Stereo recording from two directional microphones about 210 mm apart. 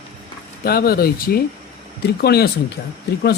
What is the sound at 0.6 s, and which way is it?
Speech, 45° left (ahead or behind).